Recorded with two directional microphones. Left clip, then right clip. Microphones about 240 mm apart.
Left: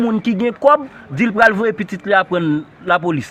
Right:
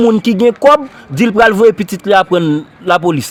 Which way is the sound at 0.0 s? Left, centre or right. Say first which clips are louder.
Right 9 dB; right.